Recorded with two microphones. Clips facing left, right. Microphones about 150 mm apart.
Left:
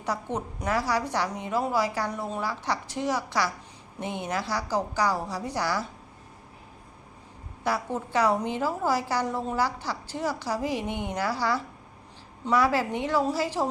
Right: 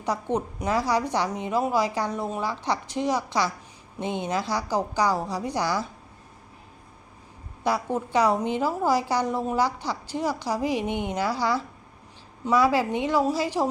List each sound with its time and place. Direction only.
0.0 s a woman's voice: 15° right (ahead or behind)
7.6 s a woman's voice: 15° right (ahead or behind)